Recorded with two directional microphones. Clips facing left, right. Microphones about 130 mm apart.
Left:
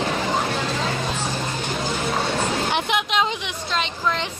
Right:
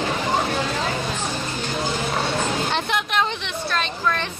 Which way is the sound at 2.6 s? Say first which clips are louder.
Left 1 dB; 15° left (ahead or behind).